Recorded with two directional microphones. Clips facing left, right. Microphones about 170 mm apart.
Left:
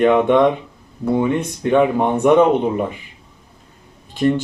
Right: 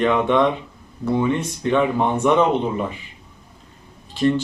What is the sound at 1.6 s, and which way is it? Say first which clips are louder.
Speech: left 4 dB; 50° left (ahead or behind).